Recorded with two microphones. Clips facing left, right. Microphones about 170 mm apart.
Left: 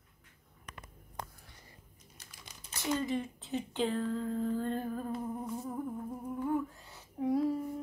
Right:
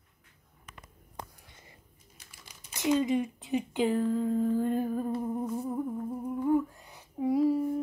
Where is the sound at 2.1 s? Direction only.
5° right (ahead or behind).